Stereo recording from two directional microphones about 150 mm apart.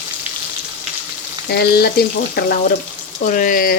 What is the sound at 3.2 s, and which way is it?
Speech, 60° left (ahead or behind).